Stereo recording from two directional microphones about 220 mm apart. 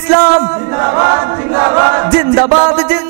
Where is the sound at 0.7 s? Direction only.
20° right (ahead or behind).